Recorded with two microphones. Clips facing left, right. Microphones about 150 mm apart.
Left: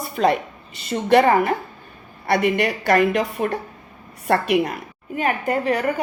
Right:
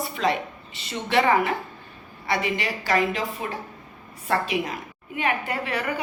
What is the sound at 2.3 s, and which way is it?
A woman's voice, 55° left (ahead or behind).